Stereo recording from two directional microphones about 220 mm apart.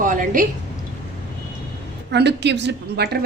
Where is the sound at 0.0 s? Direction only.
35° right (ahead or behind).